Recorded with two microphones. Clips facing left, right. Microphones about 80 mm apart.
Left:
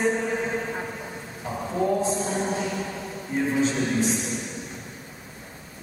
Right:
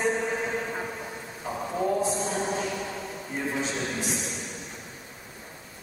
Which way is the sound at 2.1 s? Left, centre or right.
Centre.